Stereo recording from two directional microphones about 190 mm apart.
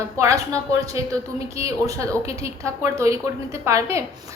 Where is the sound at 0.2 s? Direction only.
15° right (ahead or behind).